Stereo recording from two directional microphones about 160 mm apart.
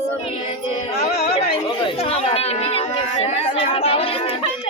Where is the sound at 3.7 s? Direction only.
35° left (ahead or behind).